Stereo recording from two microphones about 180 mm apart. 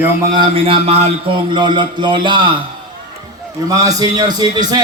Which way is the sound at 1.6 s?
25° right (ahead or behind).